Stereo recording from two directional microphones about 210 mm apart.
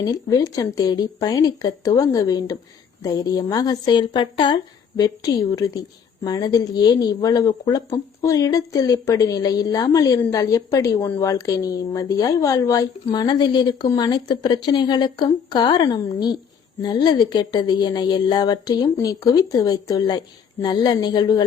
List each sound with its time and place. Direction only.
0.0 s a woman's voice: 20° left (ahead or behind)